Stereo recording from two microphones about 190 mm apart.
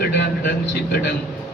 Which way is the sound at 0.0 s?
55° left (ahead or behind).